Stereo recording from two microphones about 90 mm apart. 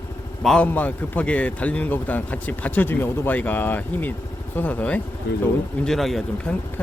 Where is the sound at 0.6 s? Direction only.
20° left (ahead or behind).